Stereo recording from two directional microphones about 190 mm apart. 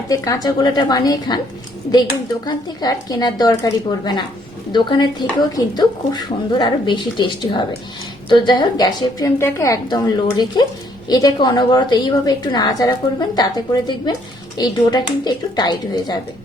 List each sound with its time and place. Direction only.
0.1 s a woman's voice: 20° left (ahead or behind)